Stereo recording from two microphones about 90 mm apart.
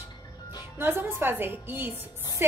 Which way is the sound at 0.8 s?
25° right (ahead or behind).